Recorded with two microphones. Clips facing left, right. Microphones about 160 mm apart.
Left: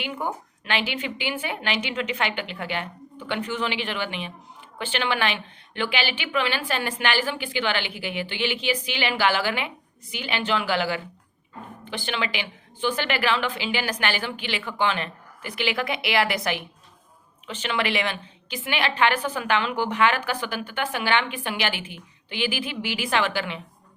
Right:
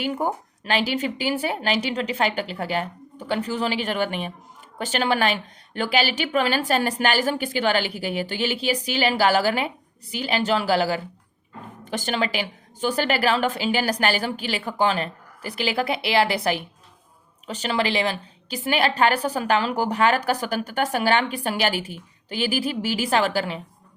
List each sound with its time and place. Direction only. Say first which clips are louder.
0.0 s a woman's voice: right 5 dB; 40° right (ahead or behind)